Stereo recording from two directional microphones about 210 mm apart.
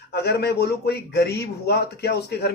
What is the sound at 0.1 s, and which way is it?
A man's voice, 50° left (ahead or behind).